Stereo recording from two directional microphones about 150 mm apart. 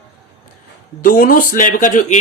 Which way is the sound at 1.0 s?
70° left (ahead or behind).